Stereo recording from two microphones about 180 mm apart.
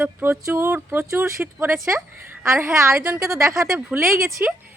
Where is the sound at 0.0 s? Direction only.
10° right (ahead or behind).